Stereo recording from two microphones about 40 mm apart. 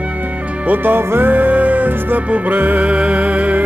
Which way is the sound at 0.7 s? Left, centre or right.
Right.